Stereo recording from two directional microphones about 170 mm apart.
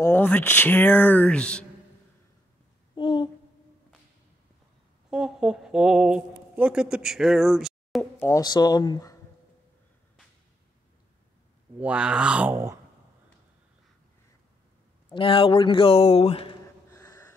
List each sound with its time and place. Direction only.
0.0 s speech: 10° left (ahead or behind)
3.0 s a sound: 30° left (ahead or behind)
5.1 s speech: 5° right (ahead or behind)
8.2 s speech: 20° left (ahead or behind)
11.8 s speech: 5° right (ahead or behind)
15.1 s speech: 30° left (ahead or behind)
17.0 s a sound: 20° left (ahead or behind)